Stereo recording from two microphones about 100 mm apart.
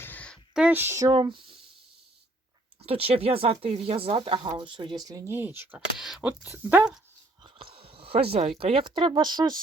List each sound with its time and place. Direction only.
0.0 s a sound: 15° left (ahead or behind)
0.7 s speech: 20° right (ahead or behind)
1.1 s speech: 55° right (ahead or behind)
2.8 s speech: 75° right (ahead or behind)
4.5 s speech: 55° right (ahead or behind); by 5.3 s 35° right (ahead or behind)
5.3 s speech: 20° right (ahead or behind)
6.0 s speech: 5° right (ahead or behind)
7.4 s speech: 65° right (ahead or behind); by 9.6 s 45° right (ahead or behind)